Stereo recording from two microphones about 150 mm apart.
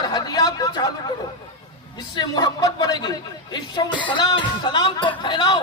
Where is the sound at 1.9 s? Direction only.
25° left (ahead or behind).